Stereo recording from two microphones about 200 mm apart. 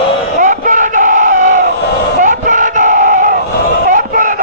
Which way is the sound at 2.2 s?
40° right (ahead or behind).